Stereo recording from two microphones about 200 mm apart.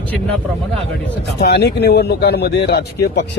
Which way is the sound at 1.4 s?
55° left (ahead or behind).